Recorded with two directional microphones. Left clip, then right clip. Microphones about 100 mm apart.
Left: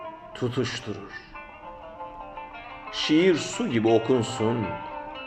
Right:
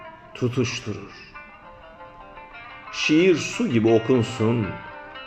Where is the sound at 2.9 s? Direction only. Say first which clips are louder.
Right 3 dB; 15° right (ahead or behind).